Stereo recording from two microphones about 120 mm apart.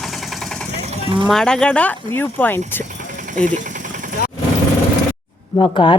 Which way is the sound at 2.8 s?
90° right.